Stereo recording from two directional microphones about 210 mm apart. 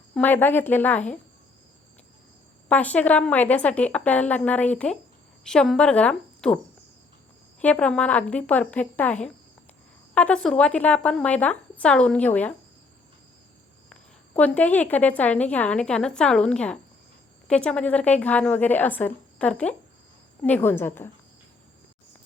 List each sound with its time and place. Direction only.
0.1 s a woman's voice: 10° left (ahead or behind)
2.6 s a woman's voice: 5° left (ahead or behind)
7.6 s a woman's voice: 5° left (ahead or behind)
13.9 s a woman's voice: 5° left (ahead or behind)